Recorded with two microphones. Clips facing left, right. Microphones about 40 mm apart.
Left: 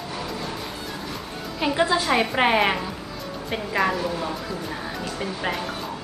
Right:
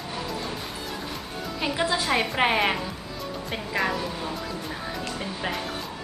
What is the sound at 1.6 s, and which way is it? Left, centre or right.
A woman's voice, centre.